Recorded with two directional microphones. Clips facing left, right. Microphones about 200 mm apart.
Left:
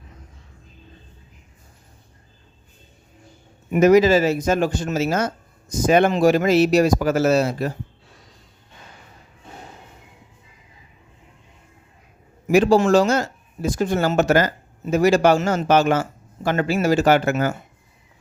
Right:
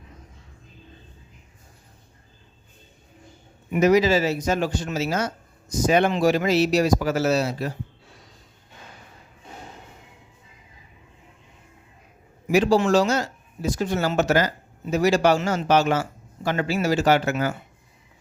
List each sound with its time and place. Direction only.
3.7 s speech: 50° left (ahead or behind)
12.5 s speech: 50° left (ahead or behind)